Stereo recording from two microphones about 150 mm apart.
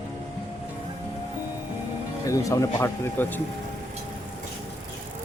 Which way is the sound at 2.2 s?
20° left (ahead or behind).